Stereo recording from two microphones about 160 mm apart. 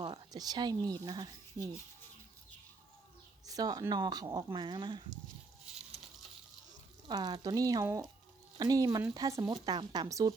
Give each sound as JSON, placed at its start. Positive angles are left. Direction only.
{"t": 0.0, "sound": "speech", "side_deg": -30}
{"t": 3.4, "sound": "speech", "side_deg": -25}
{"t": 7.1, "sound": "speech", "side_deg": -25}